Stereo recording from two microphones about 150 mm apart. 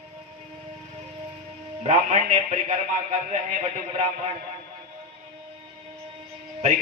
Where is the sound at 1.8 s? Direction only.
50° right (ahead or behind).